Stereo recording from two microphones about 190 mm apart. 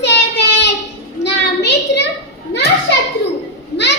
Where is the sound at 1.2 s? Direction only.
65° left (ahead or behind).